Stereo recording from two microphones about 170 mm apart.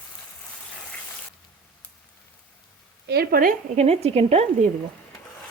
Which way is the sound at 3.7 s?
40° right (ahead or behind).